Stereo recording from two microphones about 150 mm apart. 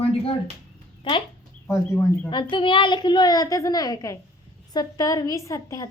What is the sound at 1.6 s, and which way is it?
Speech, 15° left (ahead or behind).